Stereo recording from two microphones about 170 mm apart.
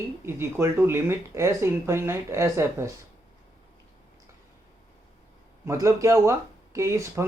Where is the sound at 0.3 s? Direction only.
15° right (ahead or behind).